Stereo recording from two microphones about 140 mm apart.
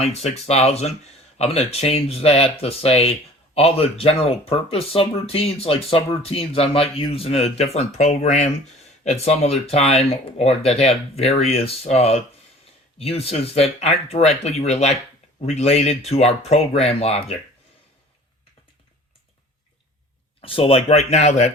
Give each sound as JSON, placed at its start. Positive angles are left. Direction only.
{"t": 0.0, "sound": "speech", "side_deg": 50}
{"t": 20.4, "sound": "speech", "side_deg": 40}